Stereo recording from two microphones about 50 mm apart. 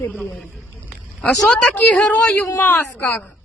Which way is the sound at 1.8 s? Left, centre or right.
Left.